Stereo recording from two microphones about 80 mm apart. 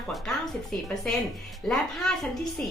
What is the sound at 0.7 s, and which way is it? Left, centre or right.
A woman's voice, centre.